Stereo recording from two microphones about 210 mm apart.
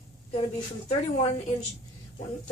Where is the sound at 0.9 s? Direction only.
25° left (ahead or behind).